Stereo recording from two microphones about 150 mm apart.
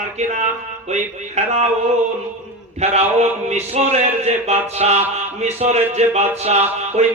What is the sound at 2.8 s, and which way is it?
Speech, 45° right (ahead or behind).